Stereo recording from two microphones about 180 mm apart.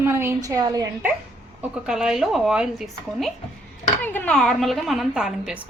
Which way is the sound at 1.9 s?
5° right (ahead or behind).